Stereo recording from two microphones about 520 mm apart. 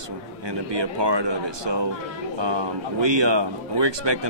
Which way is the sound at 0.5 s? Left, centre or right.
Right.